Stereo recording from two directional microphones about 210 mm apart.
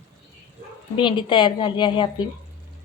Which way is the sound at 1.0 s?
20° left (ahead or behind).